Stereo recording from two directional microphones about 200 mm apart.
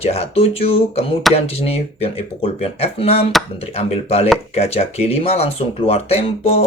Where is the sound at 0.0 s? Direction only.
30° left (ahead or behind).